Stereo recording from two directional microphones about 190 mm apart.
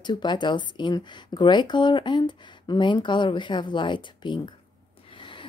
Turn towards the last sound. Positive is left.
turn(degrees=25)  # may be behind; listen again after turning